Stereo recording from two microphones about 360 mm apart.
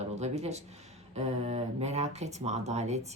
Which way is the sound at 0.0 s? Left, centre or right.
Centre.